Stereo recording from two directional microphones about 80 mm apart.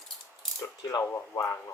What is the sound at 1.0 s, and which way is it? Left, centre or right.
Speech, left.